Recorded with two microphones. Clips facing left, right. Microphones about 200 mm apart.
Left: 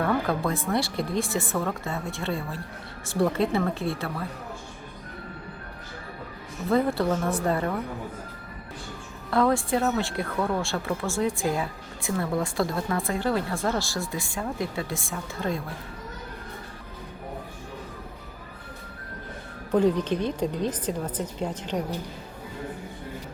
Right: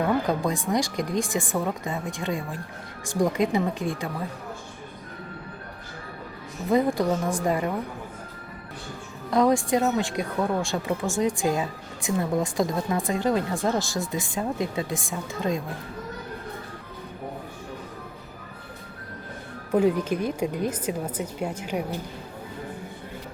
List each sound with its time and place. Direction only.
0.0 s speech: 15° right (ahead or behind)
6.7 s speech: 15° right (ahead or behind)
9.3 s speech: 15° right (ahead or behind)
19.7 s speech: 10° right (ahead or behind)